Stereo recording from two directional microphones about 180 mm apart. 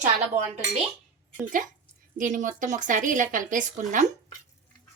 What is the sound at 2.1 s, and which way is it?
A woman's voice, 45° right (ahead or behind).